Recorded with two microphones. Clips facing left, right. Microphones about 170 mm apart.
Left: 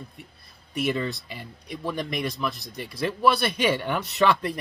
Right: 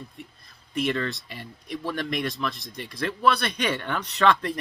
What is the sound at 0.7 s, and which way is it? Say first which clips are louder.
Speech: even; 5° left (ahead or behind).